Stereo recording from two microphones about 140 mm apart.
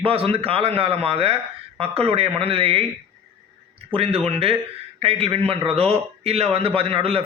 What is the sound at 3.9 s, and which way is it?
A man's voice, 45° right (ahead or behind).